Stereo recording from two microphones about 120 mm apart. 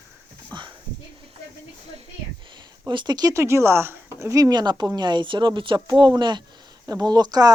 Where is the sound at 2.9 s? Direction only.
35° right (ahead or behind).